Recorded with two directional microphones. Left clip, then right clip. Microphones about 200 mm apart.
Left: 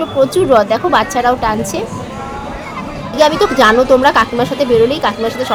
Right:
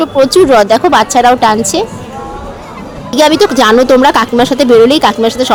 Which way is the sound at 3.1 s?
40° right (ahead or behind).